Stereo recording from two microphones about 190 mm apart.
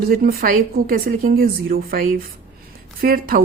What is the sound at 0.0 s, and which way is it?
Speech, 50° right (ahead or behind).